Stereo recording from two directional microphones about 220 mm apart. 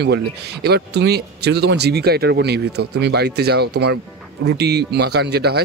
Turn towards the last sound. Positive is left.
turn(degrees=-50)  # may be behind; listen again after turning